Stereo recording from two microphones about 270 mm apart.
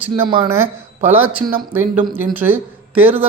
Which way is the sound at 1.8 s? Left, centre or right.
Centre.